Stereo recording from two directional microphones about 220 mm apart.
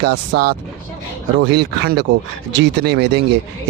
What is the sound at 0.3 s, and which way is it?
Speech, 50° right (ahead or behind).